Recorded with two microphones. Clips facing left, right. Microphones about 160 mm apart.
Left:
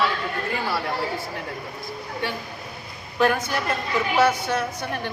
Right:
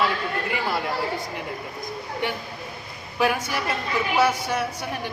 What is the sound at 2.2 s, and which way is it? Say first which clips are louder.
A man's voice: right 1 dB; 20° right (ahead or behind).